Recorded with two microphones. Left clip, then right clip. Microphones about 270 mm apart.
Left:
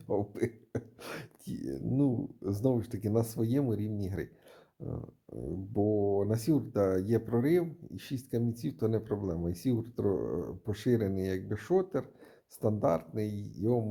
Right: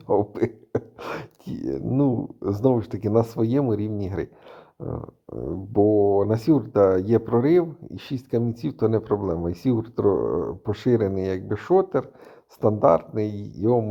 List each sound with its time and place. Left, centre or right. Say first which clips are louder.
0.1 s speech: right 11 dB; centre